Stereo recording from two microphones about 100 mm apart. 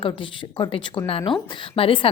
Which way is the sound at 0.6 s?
55° left (ahead or behind).